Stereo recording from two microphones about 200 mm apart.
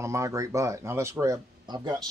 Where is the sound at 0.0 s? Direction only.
15° right (ahead or behind).